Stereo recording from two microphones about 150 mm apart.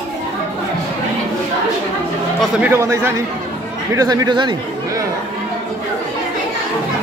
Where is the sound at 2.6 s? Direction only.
15° right (ahead or behind).